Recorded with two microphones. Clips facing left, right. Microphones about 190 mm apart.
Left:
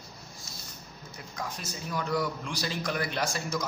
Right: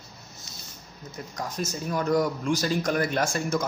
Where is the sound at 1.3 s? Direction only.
40° right (ahead or behind).